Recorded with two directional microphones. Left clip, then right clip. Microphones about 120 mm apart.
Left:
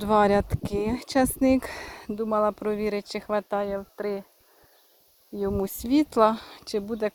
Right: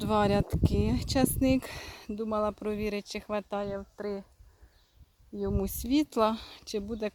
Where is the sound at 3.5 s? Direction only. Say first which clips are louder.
Left 6 dB; 10° right (ahead or behind).